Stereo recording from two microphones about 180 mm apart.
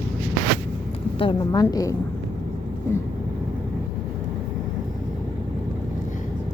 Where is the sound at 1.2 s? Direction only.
20° left (ahead or behind).